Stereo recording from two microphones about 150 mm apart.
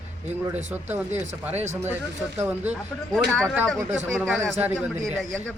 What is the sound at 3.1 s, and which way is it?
Speech, 5° left (ahead or behind).